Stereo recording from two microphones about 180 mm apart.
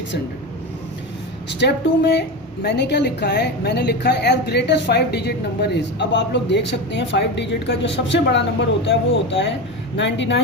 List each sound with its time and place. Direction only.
1.5 s a woman's voice: 70° left (ahead or behind); by 10.4 s 85° left